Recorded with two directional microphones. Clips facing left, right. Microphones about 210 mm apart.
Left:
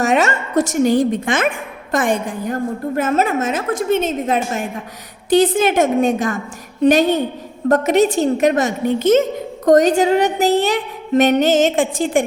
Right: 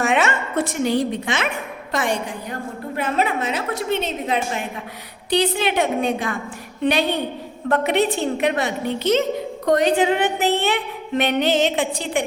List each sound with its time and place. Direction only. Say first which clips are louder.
0.0 s a woman's voice: left 4 dB; 40° left (ahead or behind)